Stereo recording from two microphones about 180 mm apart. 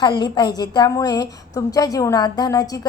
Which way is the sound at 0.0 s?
25° left (ahead or behind).